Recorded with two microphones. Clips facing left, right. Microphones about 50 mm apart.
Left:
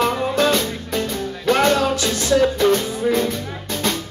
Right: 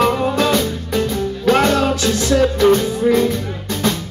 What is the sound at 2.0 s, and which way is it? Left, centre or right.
Music, right.